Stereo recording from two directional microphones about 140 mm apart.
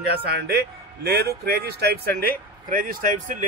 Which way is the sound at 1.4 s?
90° right.